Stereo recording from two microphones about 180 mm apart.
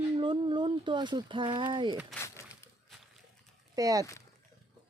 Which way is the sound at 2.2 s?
15° left (ahead or behind).